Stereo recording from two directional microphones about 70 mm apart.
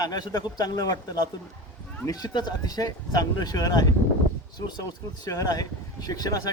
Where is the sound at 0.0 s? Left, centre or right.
Left.